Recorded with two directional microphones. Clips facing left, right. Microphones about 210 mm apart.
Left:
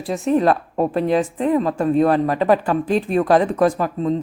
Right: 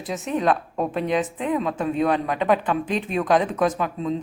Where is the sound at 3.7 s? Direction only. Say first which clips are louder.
Left 4 dB; 35° left (ahead or behind).